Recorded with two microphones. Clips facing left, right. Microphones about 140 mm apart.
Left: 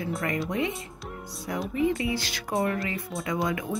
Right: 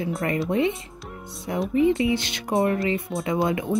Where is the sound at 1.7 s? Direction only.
25° right (ahead or behind).